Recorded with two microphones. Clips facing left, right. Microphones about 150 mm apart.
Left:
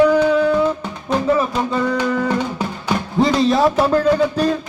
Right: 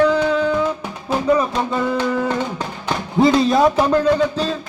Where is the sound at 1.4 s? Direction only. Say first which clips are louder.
Left 1 dB; centre (ahead or behind).